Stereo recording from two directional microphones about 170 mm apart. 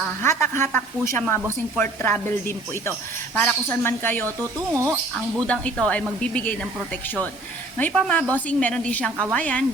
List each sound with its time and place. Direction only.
0.2 s a woman's voice: 15° left (ahead or behind)
3.3 s a woman's voice: 10° left (ahead or behind)
4.4 s speech: 15° right (ahead or behind)
5.5 s a woman's voice: 5° left (ahead or behind)
7.8 s a woman's voice: 5° left (ahead or behind)